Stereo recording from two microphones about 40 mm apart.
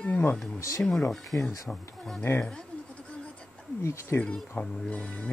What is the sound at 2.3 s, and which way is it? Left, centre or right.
Speech, left.